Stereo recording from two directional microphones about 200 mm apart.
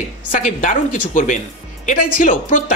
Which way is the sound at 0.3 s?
40° left (ahead or behind).